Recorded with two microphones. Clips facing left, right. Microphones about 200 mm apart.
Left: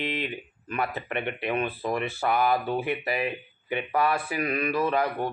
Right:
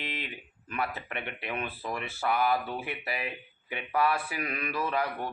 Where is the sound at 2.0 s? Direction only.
5° right (ahead or behind).